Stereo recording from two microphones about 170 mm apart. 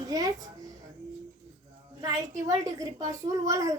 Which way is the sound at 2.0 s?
20° right (ahead or behind).